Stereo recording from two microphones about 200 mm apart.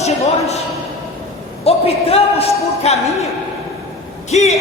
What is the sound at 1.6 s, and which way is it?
A man's voice, 30° left (ahead or behind).